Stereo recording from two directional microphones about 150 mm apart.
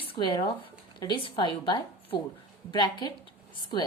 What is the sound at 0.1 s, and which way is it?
A woman's voice, 30° left (ahead or behind).